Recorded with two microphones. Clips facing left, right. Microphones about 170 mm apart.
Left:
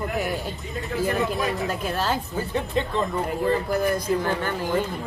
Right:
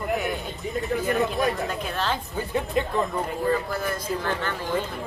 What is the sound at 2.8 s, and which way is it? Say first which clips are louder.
Speech: even; 25° left (ahead or behind).